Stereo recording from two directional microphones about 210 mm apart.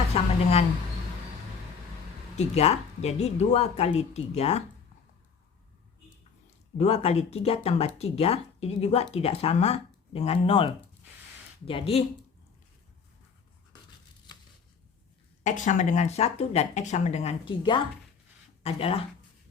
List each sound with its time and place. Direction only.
0.1 s speech: 30° left (ahead or behind)
2.3 s speech: 30° left (ahead or behind)
6.7 s speech: 30° left (ahead or behind)
15.4 s speech: 35° left (ahead or behind)